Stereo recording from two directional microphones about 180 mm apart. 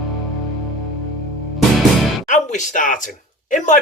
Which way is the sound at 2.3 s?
45° left (ahead or behind).